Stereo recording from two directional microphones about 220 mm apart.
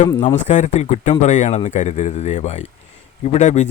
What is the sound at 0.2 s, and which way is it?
Speech, 35° left (ahead or behind).